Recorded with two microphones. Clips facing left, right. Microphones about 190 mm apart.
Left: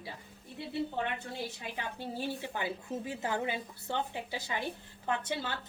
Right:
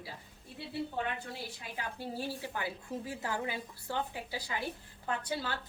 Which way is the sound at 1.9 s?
20° left (ahead or behind).